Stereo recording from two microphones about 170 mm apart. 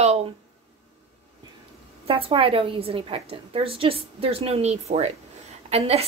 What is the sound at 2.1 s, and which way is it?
A woman's voice, 35° right (ahead or behind).